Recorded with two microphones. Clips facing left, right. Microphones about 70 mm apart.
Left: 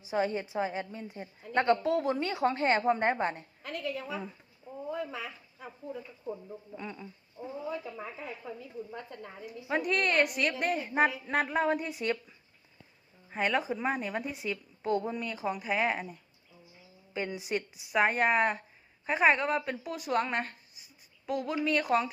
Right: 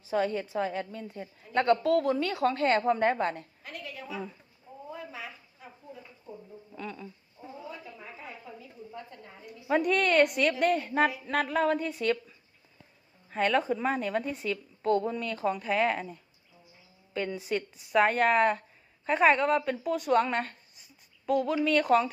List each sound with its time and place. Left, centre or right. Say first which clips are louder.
0.0 s a woman's voice: right 2 dB; centre
3.7 s a sound: left 7 dB; left
9.5 s a woman's voice: right 4 dB; centre
13.3 s a woman's voice: right 3 dB; centre
17.2 s a woman's voice: right 2 dB; centre